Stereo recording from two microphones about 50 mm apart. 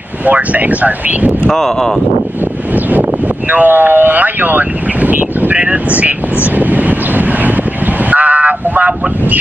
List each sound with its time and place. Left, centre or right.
0.2 s speech: right
1.5 s speech: centre
2.4 s a sound: right
5.9 s speech: right
6.4 s vehicle: right